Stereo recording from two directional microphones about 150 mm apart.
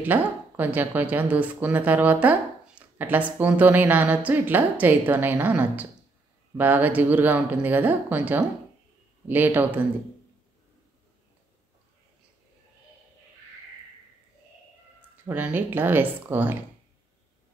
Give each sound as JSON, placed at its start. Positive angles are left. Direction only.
{"t": 0.0, "sound": "speech", "side_deg": -10}
{"t": 15.2, "sound": "speech", "side_deg": -10}